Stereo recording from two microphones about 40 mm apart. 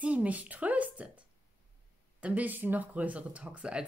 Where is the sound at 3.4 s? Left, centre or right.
Right.